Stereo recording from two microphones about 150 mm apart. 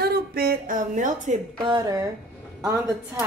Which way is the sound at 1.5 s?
30° right (ahead or behind).